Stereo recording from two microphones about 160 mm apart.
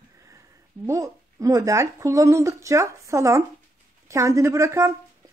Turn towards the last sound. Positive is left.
turn(degrees=-20)  # may be behind; listen again after turning